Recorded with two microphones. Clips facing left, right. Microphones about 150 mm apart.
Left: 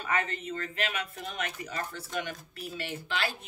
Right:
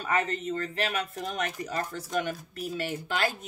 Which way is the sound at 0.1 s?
35° right (ahead or behind).